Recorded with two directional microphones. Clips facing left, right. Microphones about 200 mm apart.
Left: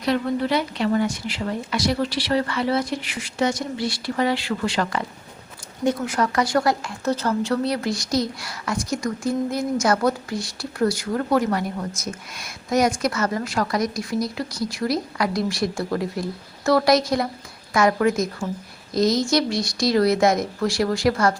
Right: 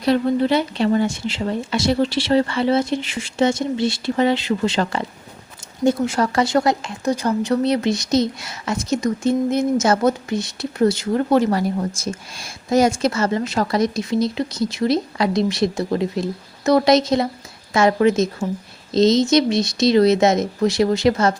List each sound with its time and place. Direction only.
0.0 s speech: 30° right (ahead or behind)